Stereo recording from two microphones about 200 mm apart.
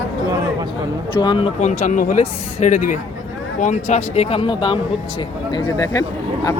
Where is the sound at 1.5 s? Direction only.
35° left (ahead or behind).